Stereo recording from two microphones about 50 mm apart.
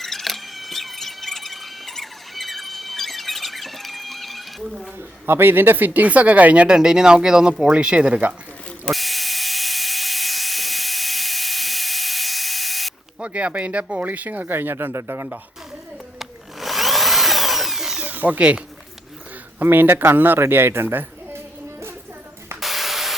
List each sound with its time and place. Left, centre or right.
0.0 s a sound: centre
4.6 s speech: centre
5.2 s speech: right
8.9 s tools: centre
13.1 s speech: right
14.9 s speech: right
16.1 s drill: centre
18.0 s speech: right
19.5 s speech: right
20.4 s music: right
22.6 s spray: centre